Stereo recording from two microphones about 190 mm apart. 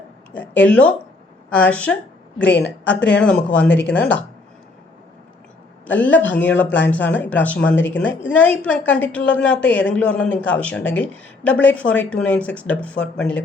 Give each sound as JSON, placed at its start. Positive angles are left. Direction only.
{"t": 0.3, "sound": "speech", "side_deg": 5}
{"t": 5.8, "sound": "speech", "side_deg": 10}